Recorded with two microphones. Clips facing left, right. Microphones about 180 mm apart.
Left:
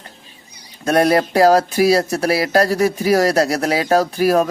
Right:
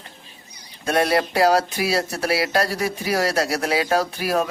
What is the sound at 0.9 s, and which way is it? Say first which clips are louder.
Speech: left 5 dB; 45° left (ahead or behind).